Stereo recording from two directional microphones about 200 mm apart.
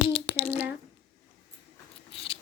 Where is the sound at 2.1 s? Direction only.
30° left (ahead or behind).